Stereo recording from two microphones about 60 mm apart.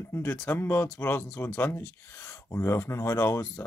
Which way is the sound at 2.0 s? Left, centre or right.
Left.